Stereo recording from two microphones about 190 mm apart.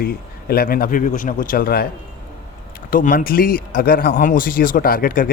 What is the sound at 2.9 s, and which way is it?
Speech, 45° left (ahead or behind).